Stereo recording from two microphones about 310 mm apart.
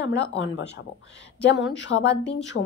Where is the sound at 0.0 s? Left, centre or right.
Left.